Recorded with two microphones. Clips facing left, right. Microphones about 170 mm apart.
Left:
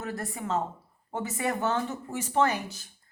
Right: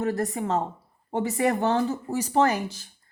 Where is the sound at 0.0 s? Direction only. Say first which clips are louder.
Right 8 dB; 40° right (ahead or behind).